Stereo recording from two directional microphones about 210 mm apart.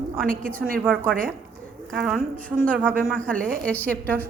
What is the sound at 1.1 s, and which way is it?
Speech, 40° right (ahead or behind).